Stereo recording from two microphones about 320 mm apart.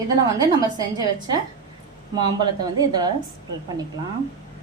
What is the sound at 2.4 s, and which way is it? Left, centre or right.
Speech, centre.